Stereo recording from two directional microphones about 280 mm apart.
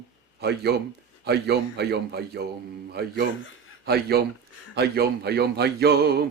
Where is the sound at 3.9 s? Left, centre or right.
Right.